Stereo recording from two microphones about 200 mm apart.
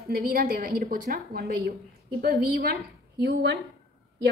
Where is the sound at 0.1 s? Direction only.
50° right (ahead or behind).